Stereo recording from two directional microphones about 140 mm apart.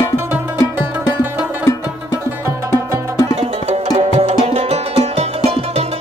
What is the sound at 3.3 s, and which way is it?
Music, 50° right (ahead or behind).